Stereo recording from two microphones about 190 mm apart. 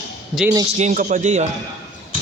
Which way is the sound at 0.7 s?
40° right (ahead or behind).